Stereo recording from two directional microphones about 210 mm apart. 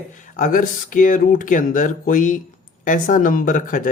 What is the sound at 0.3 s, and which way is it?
Speech, 40° left (ahead or behind).